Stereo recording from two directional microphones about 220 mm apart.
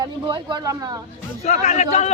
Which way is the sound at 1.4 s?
30° left (ahead or behind).